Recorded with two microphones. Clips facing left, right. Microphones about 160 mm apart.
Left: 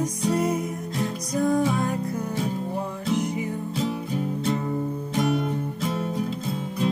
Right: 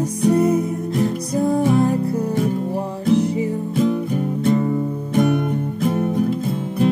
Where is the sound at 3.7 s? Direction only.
50° right (ahead or behind).